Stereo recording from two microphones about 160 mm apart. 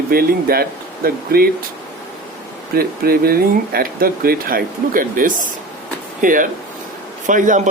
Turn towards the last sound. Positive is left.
turn(degrees=-55)  # may be behind; listen again after turning